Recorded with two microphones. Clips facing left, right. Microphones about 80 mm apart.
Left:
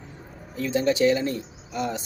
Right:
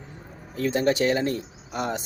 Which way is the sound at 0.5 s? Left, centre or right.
Right.